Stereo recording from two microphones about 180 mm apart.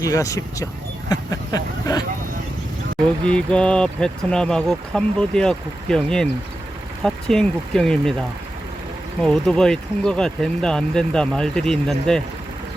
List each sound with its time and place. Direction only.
0.0 s speech: 20° left (ahead or behind)
3.2 s speech: 5° left (ahead or behind)
9.2 s speech: 5° left (ahead or behind)